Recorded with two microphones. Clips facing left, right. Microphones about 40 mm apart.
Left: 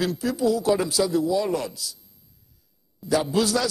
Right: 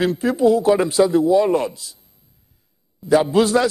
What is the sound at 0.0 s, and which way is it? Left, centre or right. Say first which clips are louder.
A man's voice: right 7 dB; right.